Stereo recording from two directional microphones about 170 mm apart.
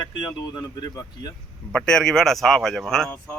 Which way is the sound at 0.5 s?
25° left (ahead or behind).